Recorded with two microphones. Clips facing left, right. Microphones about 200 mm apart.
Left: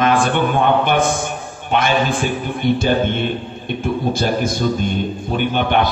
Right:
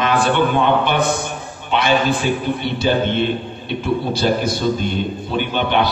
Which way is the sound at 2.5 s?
50° left (ahead or behind).